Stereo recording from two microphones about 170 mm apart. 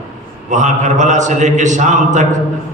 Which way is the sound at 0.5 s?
45° right (ahead or behind).